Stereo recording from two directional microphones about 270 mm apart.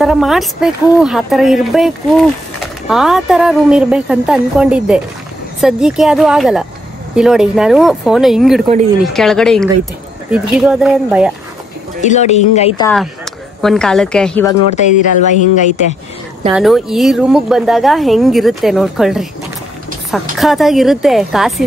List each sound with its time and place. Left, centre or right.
0.0 s a woman's voice: centre
12.0 s speech: left
12.8 s a woman's voice: centre
15.5 s speech: left
16.5 s a woman's voice: centre
20.3 s a woman's voice: centre